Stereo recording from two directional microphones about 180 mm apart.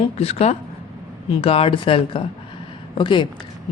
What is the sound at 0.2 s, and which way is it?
A man's voice, 35° left (ahead or behind).